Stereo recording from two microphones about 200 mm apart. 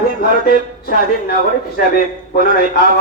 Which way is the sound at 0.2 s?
50° left (ahead or behind).